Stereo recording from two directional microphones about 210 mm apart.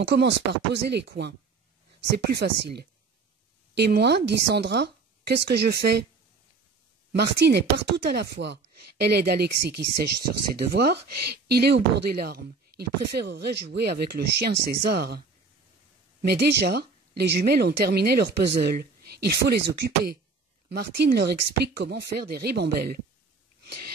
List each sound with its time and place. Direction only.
0.0 s speech: 55° right (ahead or behind)
2.3 s speech: 50° right (ahead or behind)
7.2 s speech: 50° right (ahead or behind)